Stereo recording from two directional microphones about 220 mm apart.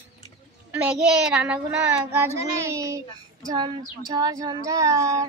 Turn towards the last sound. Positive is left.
turn(degrees=-15)  # may be behind; listen again after turning